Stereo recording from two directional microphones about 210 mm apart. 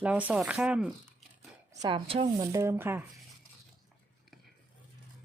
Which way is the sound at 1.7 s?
20° right (ahead or behind).